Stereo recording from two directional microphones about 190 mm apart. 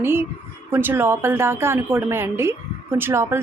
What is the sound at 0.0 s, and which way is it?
A woman's voice, 10° right (ahead or behind).